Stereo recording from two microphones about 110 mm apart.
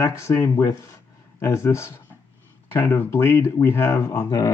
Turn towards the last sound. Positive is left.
turn(degrees=35)  # may be behind; listen again after turning